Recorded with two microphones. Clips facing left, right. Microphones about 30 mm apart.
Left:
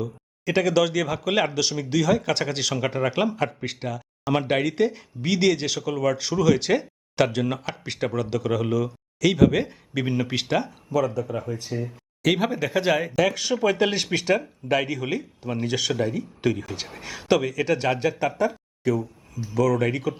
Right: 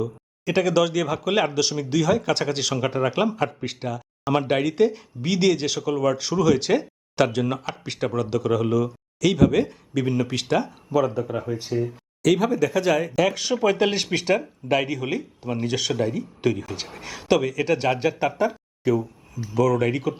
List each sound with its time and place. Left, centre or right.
0.0 s speech: centre
10.4 s speech: centre
10.7 s speech: centre
12.2 s speech: left
13.1 s speech: centre